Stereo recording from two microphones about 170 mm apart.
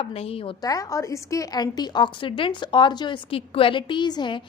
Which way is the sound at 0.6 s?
20° left (ahead or behind).